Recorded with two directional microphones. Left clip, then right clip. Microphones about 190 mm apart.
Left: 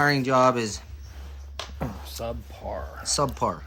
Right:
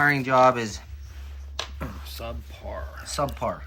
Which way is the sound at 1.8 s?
55° left (ahead or behind).